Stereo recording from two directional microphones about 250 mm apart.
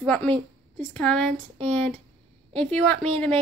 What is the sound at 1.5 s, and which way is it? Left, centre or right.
Speech, right.